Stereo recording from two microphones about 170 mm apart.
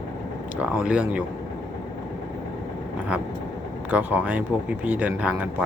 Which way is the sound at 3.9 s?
10° right (ahead or behind).